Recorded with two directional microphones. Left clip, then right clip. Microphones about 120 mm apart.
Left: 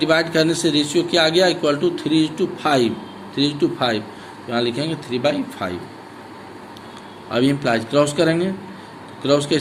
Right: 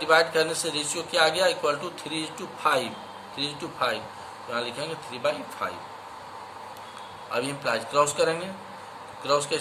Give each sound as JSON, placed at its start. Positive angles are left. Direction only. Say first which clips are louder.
{"t": 0.0, "sound": "a man's voice", "louder": "left 4 dB", "side_deg": 20}
{"t": 7.3, "sound": "a man's voice", "louder": "left 9 dB", "side_deg": 20}